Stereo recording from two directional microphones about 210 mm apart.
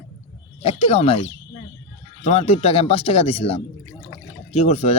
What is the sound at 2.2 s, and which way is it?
Speech, 30° left (ahead or behind).